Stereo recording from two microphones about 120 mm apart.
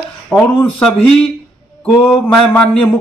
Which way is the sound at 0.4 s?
20° left (ahead or behind).